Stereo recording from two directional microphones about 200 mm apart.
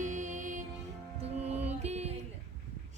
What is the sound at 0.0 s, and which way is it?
Music, 40° right (ahead or behind).